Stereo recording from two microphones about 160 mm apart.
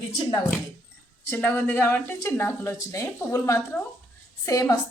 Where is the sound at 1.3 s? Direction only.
10° left (ahead or behind).